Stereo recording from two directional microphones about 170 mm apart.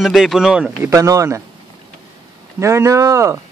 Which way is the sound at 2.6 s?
15° right (ahead or behind).